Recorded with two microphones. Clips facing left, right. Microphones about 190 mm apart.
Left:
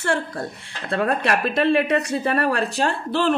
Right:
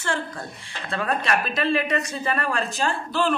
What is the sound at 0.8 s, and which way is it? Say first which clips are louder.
A woman's voice: left 4 dB; 60° left (ahead or behind).